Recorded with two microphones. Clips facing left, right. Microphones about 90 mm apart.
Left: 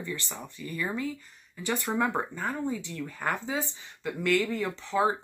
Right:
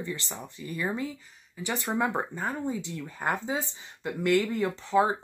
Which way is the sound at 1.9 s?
5° right (ahead or behind).